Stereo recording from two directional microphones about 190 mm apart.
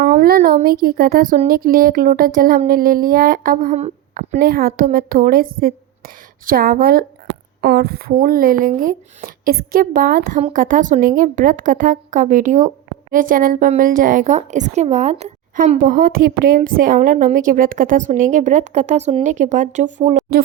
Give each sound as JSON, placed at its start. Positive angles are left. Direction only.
{"t": 0.0, "sound": "a woman's voice", "side_deg": -50}